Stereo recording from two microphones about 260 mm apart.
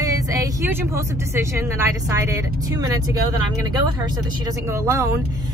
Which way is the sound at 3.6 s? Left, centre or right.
Centre.